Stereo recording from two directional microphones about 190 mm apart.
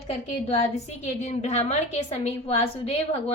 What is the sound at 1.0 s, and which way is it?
A woman's voice, 35° left (ahead or behind).